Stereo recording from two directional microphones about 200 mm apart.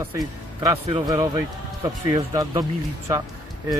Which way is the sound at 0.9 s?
25° right (ahead or behind).